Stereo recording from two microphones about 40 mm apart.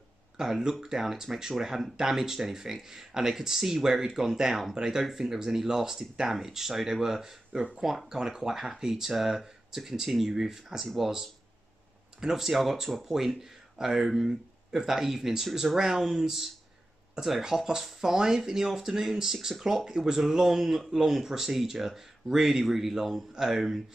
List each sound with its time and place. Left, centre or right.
0.4 s speech: centre